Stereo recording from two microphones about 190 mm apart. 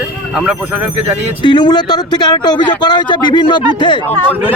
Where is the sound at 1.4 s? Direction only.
25° left (ahead or behind).